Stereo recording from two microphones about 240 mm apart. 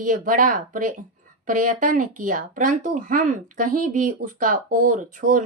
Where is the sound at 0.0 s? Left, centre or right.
Right.